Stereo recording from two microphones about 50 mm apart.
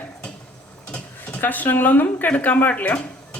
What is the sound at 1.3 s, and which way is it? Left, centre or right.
A woman's voice, left.